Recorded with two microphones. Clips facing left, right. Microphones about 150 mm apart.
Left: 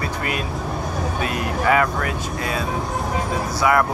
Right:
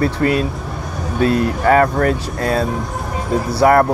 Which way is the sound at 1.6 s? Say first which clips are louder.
Right 4 dB; 45° right (ahead or behind).